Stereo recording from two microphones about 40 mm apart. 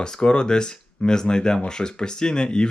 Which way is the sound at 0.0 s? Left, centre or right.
Left.